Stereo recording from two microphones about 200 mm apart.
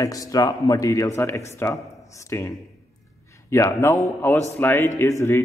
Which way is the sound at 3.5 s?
15° left (ahead or behind).